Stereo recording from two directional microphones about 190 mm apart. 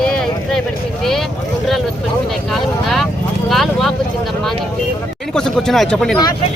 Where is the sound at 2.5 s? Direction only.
Centre (ahead or behind).